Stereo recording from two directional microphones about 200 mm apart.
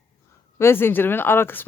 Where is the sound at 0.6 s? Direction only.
10° left (ahead or behind).